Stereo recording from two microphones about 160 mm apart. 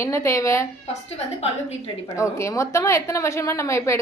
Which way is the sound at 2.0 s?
20° left (ahead or behind).